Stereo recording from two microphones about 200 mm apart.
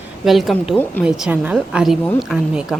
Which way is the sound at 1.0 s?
5° right (ahead or behind).